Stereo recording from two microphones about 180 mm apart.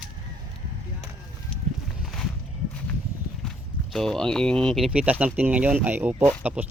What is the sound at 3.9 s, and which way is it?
Speech, 5° left (ahead or behind).